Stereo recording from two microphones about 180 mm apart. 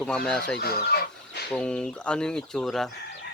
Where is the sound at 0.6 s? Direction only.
60° left (ahead or behind).